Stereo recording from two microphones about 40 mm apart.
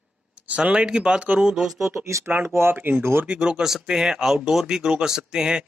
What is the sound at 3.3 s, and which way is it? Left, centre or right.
Speech, right.